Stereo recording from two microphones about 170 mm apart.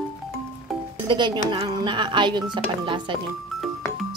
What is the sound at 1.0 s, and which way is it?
Speech, 25° right (ahead or behind).